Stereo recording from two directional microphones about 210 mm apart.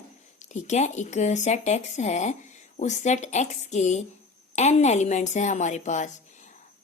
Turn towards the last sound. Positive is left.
turn(degrees=35)  # may be behind; listen again after turning